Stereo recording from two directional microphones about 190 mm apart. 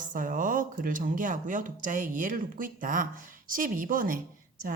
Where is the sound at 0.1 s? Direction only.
45° right (ahead or behind).